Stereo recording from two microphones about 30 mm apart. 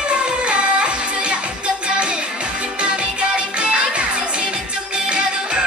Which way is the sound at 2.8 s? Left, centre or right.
Right.